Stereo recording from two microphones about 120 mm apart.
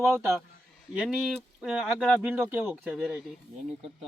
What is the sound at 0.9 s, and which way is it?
Speech, centre (ahead or behind).